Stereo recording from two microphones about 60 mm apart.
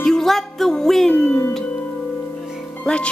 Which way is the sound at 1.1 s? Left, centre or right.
Centre.